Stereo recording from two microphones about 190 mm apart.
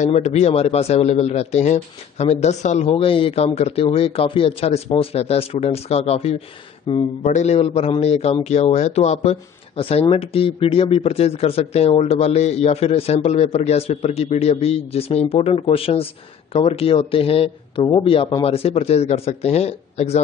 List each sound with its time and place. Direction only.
0.0 s a man's voice: 35° left (ahead or behind)